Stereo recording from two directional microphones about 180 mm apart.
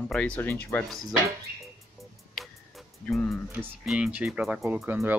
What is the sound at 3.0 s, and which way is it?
Speech, centre (ahead or behind).